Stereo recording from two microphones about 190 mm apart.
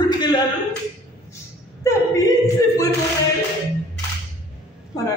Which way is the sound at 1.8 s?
15° left (ahead or behind).